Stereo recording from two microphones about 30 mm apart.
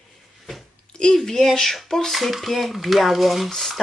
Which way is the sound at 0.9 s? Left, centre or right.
Left.